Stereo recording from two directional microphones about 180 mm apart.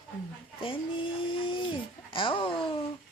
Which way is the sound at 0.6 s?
30° left (ahead or behind).